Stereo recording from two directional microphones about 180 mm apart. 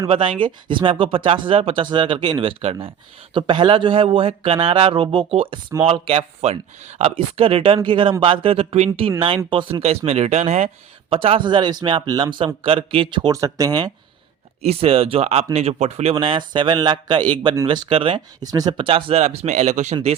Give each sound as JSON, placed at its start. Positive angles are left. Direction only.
{"t": 0.1, "sound": "a man's voice", "side_deg": -30}
{"t": 14.6, "sound": "a man's voice", "side_deg": -35}